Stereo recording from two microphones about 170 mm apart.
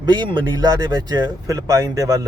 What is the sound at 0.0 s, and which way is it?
A man's voice, 25° right (ahead or behind).